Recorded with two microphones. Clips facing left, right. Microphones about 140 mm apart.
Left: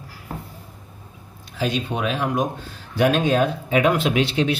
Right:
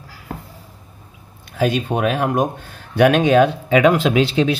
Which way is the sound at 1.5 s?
50° right (ahead or behind).